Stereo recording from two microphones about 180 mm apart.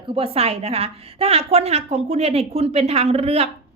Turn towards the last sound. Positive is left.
turn(degrees=-35)  # may be behind; listen again after turning